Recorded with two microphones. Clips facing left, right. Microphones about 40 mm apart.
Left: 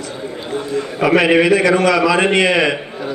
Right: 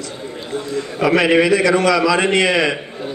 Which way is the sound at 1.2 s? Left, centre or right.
Left.